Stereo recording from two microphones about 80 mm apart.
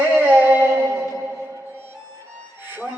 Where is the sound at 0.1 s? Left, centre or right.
Right.